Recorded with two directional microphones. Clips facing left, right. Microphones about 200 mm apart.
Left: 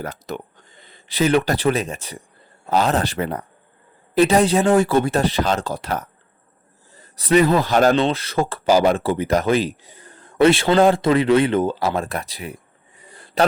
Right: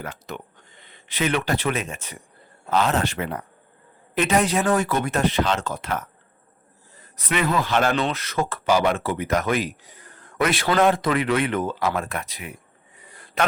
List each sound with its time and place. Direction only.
0.0 s speech: 40° left (ahead or behind)
7.2 s speech: 35° left (ahead or behind)
13.1 s a sound: 30° left (ahead or behind)